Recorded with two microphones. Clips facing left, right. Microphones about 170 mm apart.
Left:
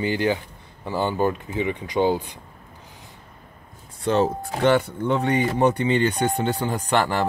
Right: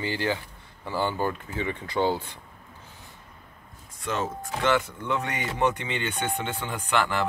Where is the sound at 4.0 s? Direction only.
35° left (ahead or behind).